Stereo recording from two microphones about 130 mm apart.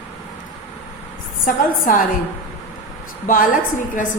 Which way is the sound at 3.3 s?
90° left.